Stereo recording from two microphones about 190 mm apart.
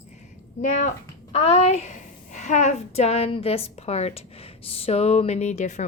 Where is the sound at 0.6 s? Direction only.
40° left (ahead or behind).